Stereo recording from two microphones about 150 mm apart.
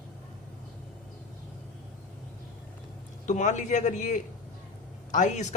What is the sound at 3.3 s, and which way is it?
A man's voice, 55° left (ahead or behind).